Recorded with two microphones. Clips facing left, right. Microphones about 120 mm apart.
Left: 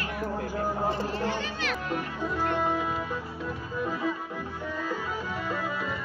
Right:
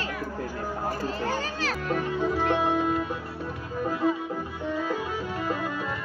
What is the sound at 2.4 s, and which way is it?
Music, 65° right (ahead or behind).